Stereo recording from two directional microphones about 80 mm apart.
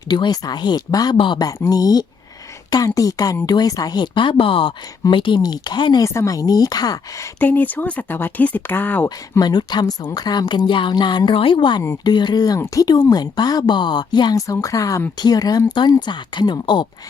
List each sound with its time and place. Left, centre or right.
0.1 s a woman's voice: left
0.9 s a woman's voice: left
5.4 s speech: left
6.0 s speech: left
7.3 s speech: left
9.4 s a woman's voice: left
12.0 s speech: left
12.5 s speech: left
13.1 s a woman's voice: left
14.3 s speech: left
15.7 s a woman's voice: left